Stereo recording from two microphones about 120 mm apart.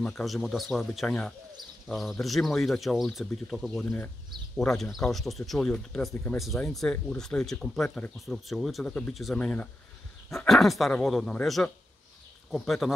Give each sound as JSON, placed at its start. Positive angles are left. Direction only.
{"t": 0.0, "sound": "speech", "side_deg": 0}
{"t": 3.8, "sound": "speech", "side_deg": 15}
{"t": 4.6, "sound": "speech", "side_deg": 0}